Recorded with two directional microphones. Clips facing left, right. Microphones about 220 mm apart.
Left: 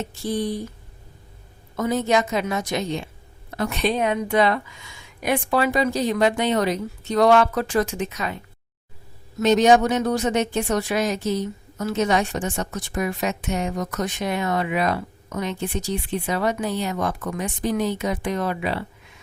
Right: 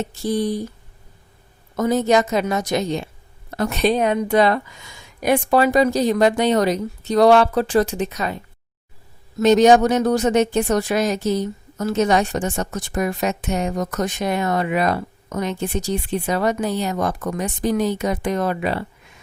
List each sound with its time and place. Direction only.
0.1 s speech: 40° right (ahead or behind)
1.7 s speech: 40° right (ahead or behind)
9.4 s speech: 40° right (ahead or behind)